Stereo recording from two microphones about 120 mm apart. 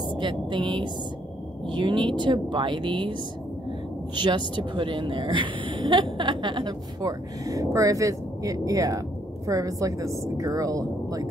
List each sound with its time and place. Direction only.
0.1 s a woman's voice: 40° right (ahead or behind)